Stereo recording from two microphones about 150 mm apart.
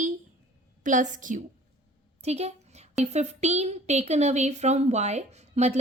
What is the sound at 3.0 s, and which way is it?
A woman's voice, 50° right (ahead or behind).